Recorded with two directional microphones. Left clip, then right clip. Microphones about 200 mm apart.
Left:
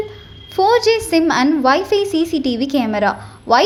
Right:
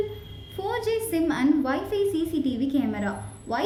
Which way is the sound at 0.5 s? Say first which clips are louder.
Left 14 dB; 35° left (ahead or behind).